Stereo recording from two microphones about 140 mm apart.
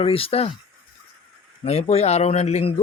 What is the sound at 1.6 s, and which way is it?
A man's voice, 50° left (ahead or behind).